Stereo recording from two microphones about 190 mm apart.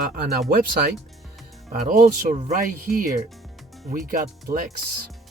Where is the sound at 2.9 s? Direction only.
Centre (ahead or behind).